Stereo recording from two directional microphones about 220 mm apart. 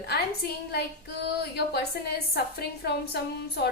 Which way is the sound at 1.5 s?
45° left (ahead or behind).